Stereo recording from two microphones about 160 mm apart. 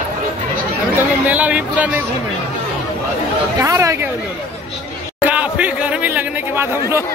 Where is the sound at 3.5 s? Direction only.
20° right (ahead or behind).